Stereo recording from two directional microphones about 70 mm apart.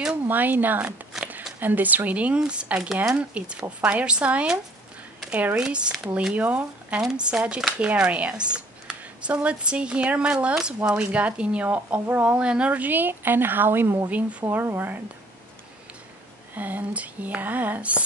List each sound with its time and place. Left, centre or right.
0.1 s speech: right
5.6 s speech: centre; by 15.0 s right
16.5 s speech: right